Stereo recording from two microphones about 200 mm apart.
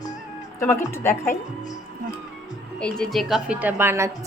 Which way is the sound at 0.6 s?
15° left (ahead or behind).